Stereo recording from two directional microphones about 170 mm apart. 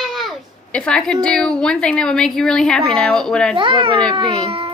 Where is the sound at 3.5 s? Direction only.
30° right (ahead or behind).